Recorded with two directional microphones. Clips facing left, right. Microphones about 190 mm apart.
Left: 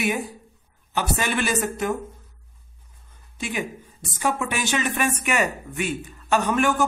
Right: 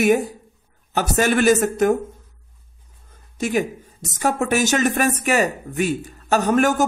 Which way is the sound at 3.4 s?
40° right (ahead or behind).